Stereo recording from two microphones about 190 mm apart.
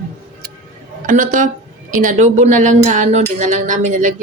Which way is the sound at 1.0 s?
45° right (ahead or behind).